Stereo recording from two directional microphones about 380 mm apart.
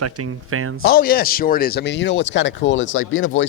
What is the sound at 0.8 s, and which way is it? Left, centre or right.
Speech, left.